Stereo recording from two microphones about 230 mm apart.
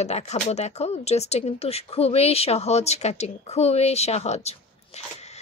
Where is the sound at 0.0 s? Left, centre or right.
Left.